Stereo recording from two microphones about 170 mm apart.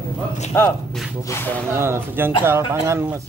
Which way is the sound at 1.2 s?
15° left (ahead or behind).